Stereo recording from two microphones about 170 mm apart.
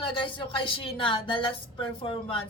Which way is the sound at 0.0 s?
30° left (ahead or behind).